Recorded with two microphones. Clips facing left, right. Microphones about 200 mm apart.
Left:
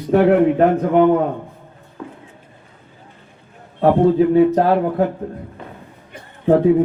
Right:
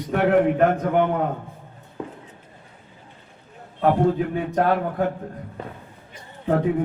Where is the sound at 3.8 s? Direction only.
35° left (ahead or behind).